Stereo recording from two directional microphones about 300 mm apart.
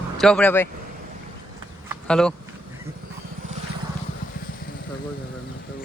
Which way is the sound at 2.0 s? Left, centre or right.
Centre.